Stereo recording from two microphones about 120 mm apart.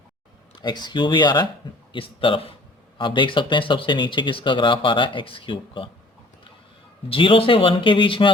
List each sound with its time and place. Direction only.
0.6 s speech: 35° left (ahead or behind)
7.1 s speech: 50° left (ahead or behind)